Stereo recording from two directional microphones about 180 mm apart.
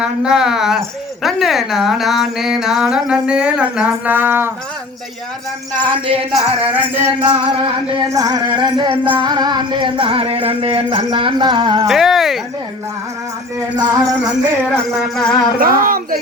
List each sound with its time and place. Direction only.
0.0 s speech: 5° right (ahead or behind)
5.8 s jingle bell: 30° right (ahead or behind)
6.3 s music: 10° right (ahead or behind)
8.1 s music: 20° right (ahead or behind)
11.9 s speech: centre (ahead or behind)
13.8 s music: 20° right (ahead or behind)
14.8 s speech: centre (ahead or behind)
15.6 s speech: 50° right (ahead or behind)